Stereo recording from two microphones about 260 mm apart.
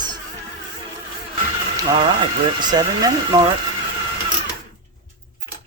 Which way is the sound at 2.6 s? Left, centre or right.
Centre.